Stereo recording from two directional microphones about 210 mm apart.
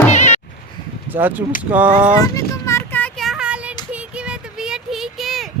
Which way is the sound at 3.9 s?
5° right (ahead or behind).